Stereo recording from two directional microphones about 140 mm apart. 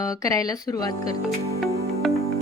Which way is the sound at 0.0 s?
25° left (ahead or behind).